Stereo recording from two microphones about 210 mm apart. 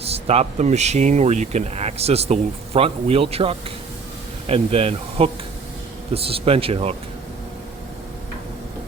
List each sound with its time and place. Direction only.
0.0 s speech: 30° right (ahead or behind)